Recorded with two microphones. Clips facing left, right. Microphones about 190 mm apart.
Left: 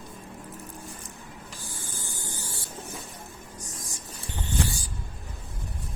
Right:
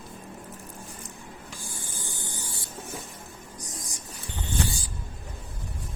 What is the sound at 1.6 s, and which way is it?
Spray, 15° right (ahead or behind).